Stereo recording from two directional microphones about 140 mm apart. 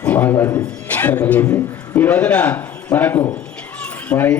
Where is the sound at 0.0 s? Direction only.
10° left (ahead or behind).